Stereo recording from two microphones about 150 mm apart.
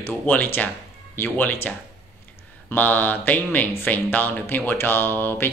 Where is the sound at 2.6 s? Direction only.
10° left (ahead or behind).